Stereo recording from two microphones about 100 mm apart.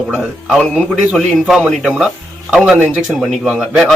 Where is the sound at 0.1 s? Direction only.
10° right (ahead or behind).